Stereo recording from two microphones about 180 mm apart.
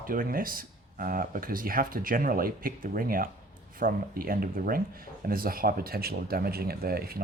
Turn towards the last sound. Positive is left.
turn(degrees=-55)  # may be behind; listen again after turning